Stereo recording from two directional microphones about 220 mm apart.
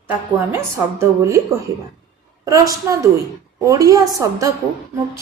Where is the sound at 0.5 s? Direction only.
10° right (ahead or behind).